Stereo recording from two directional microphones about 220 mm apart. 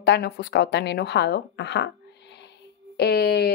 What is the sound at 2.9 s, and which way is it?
Speech, 45° left (ahead or behind).